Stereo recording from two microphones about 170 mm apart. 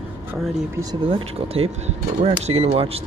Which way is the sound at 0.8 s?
25° right (ahead or behind).